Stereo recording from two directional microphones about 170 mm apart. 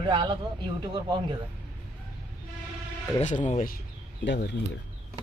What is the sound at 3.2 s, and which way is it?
Speech, 45° left (ahead or behind).